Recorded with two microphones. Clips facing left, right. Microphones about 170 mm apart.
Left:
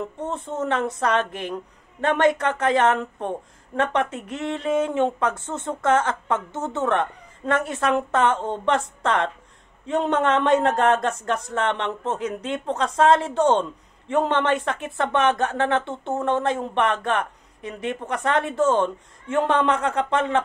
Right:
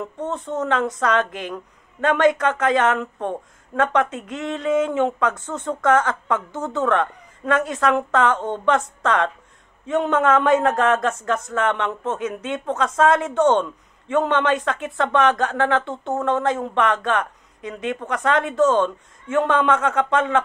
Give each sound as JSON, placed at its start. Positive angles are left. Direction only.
{"t": 0.2, "sound": "a man's voice", "side_deg": 30}